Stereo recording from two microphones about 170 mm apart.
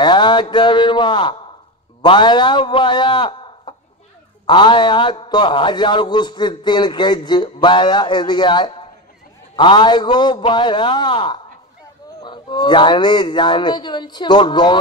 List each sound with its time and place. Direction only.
0.0 s a man's voice: 25° left (ahead or behind)